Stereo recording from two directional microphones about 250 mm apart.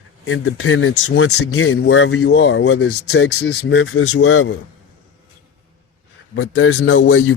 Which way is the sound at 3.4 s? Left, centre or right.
Left.